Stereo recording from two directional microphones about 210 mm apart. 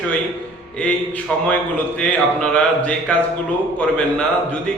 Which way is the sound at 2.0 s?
5° left (ahead or behind).